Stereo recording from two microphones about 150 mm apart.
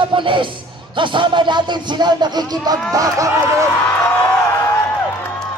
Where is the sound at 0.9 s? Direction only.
35° right (ahead or behind).